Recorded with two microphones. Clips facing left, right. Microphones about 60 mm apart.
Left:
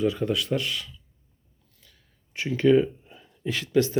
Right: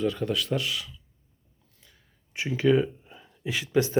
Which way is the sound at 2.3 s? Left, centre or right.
Centre.